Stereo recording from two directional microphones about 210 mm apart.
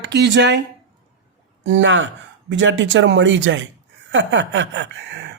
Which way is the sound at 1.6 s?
60° right (ahead or behind).